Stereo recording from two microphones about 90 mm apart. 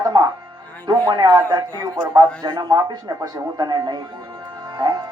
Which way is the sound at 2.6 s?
50° right (ahead or behind).